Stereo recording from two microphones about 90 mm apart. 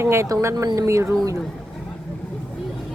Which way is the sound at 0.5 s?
40° right (ahead or behind).